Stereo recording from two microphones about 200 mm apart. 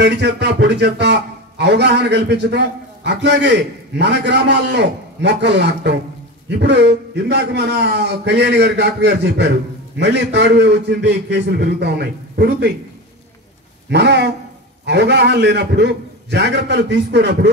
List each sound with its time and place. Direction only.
0.0 s a man's voice: 60° right (ahead or behind)
13.8 s a man's voice: 60° right (ahead or behind)